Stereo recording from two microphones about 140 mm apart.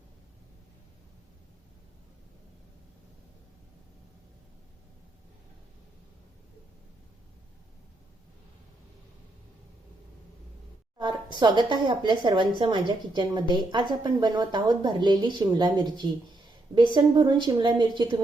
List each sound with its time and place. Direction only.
10.9 s a woman's voice: 30° right (ahead or behind)